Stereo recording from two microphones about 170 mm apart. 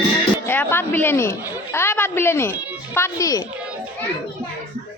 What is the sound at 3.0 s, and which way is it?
Speech, 20° left (ahead or behind).